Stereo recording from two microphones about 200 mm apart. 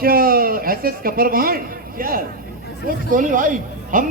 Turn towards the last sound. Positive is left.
turn(degrees=-40)  # may be behind; listen again after turning